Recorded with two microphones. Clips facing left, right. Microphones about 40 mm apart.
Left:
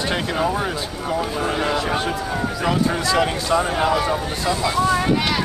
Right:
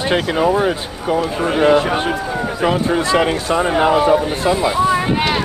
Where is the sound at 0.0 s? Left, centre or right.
Right.